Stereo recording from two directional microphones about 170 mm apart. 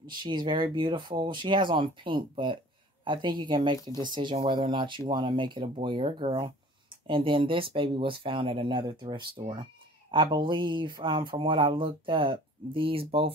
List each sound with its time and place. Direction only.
0.2 s speech: 30° right (ahead or behind)